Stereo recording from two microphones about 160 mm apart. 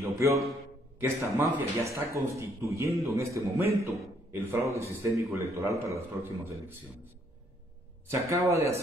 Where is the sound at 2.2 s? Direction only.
15° right (ahead or behind).